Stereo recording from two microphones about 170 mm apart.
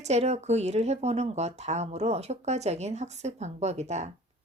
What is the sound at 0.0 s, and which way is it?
Speech, 40° right (ahead or behind).